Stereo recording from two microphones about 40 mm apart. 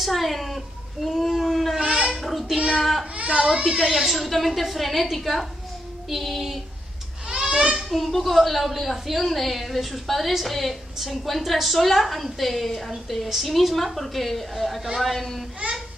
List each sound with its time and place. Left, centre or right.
0.0 s a woman's voice: centre
2.0 s child singing: centre
2.8 s a woman's voice: centre
3.3 s speech: right
3.6 s a woman's voice: centre
4.1 s a woman's voice: centre
7.2 s a sound: centre
7.7 s a woman's voice: centre